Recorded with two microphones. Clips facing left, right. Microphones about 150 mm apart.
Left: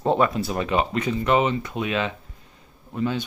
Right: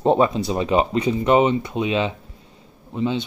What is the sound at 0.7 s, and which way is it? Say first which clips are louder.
Speech: right 5 dB; 30° right (ahead or behind).